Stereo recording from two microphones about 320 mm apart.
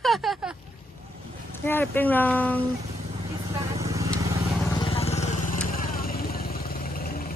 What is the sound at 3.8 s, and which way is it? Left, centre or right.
Vehicle, centre.